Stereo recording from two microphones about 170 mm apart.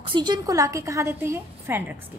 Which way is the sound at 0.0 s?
25° right (ahead or behind).